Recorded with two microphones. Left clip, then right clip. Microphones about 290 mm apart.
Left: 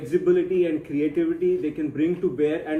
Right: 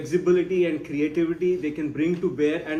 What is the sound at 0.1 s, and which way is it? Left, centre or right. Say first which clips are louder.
Speech: left 1 dB; centre.